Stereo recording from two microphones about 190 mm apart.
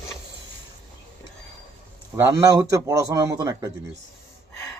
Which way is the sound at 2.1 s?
15° right (ahead or behind).